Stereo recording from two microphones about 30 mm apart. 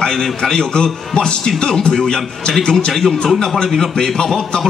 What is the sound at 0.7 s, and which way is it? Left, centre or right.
A man's voice, left.